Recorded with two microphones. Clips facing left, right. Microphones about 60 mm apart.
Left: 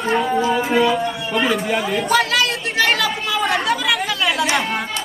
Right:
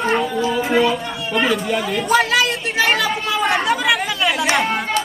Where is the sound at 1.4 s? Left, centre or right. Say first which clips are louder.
Even; centre.